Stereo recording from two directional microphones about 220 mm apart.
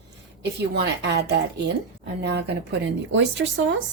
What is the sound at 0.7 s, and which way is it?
A woman's voice, 50° right (ahead or behind).